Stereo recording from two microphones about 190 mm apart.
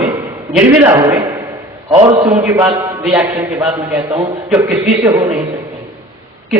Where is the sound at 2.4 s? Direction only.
15° right (ahead or behind).